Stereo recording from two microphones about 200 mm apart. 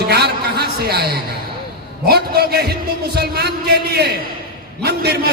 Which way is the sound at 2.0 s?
55° right (ahead or behind).